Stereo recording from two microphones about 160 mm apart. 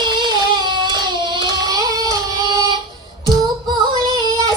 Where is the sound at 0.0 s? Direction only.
30° right (ahead or behind).